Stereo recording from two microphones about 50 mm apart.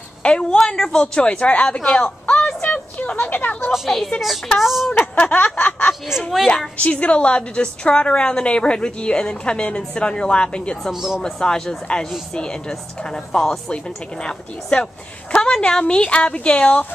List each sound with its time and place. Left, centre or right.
0.2 s a woman's voice: left
1.8 s a woman's voice: centre
2.2 s a sound: centre
3.0 s speech: left
3.7 s speech: centre
5.3 s speech: left
6.4 s a woman's voice: centre
6.8 s a woman's voice: left
10.9 s speech: centre
11.2 s a woman's voice: centre